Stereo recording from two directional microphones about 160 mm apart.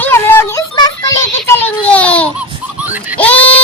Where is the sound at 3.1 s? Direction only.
10° left (ahead or behind).